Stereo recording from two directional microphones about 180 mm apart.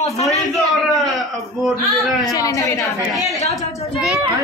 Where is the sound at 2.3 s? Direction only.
20° left (ahead or behind).